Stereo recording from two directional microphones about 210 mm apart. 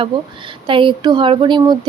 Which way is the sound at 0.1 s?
20° right (ahead or behind).